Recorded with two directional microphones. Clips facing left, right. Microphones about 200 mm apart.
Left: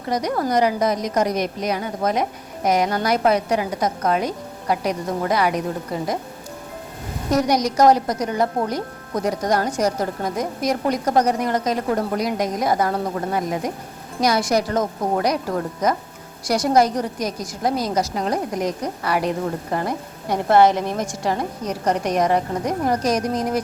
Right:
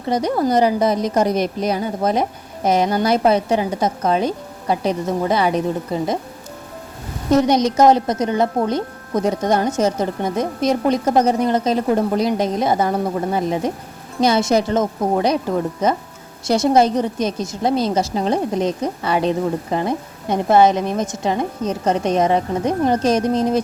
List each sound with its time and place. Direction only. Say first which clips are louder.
0.1 s a woman's voice: right 4 dB; 30° right (ahead or behind)
7.3 s a woman's voice: right 4 dB; 25° right (ahead or behind)